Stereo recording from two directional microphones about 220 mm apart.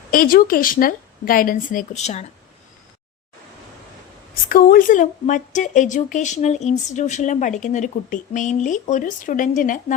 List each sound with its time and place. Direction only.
0.1 s speech: 40° left (ahead or behind)
4.4 s speech: 40° left (ahead or behind)